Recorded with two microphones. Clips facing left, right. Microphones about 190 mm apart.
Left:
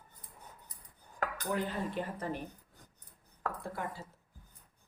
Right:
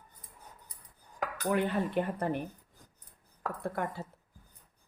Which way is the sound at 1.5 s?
65° right (ahead or behind).